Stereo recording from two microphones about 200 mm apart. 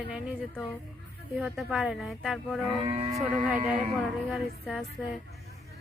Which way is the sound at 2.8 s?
30° right (ahead or behind).